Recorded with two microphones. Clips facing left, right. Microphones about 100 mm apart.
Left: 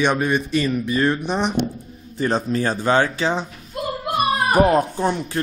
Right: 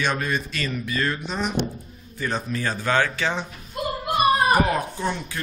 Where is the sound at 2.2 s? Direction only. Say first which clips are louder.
Left 6 dB; 35° left (ahead or behind).